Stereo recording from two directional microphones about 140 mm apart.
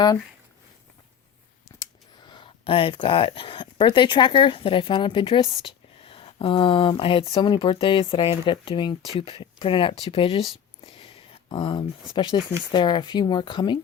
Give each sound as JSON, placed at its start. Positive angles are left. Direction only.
{"t": 2.2, "sound": "speech", "side_deg": 35}